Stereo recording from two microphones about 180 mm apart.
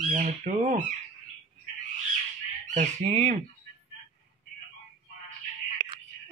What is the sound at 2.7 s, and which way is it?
Fowl, 40° right (ahead or behind).